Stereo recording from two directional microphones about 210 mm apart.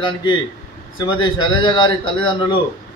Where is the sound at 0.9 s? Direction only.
20° left (ahead or behind).